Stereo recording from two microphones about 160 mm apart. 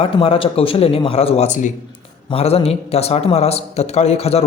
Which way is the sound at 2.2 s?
40° left (ahead or behind).